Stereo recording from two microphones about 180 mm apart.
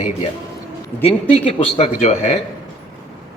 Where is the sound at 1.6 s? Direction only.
35° left (ahead or behind).